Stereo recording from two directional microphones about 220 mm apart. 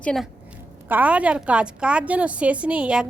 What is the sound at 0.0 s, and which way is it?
A woman's voice, 5° left (ahead or behind).